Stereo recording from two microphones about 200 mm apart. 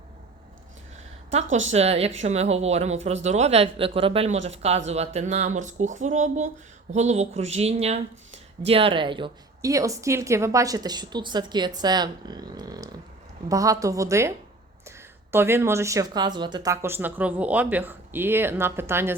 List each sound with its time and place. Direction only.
1.3 s a woman's voice: 35° right (ahead or behind); by 19.1 s 10° right (ahead or behind)